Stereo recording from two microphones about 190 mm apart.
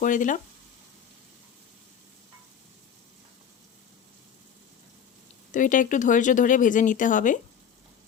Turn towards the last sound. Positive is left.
turn(degrees=45)  # may be behind; listen again after turning